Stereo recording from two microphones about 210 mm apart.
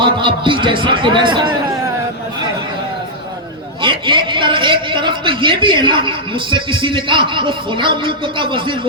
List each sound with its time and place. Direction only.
0.0 s a man's voice: 25° right (ahead or behind)
3.8 s a man's voice: 25° right (ahead or behind)